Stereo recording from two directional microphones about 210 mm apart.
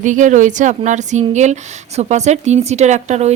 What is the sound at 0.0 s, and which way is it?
A woman's voice, 35° right (ahead or behind).